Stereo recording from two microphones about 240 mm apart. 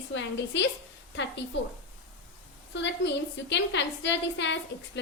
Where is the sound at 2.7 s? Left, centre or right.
Left.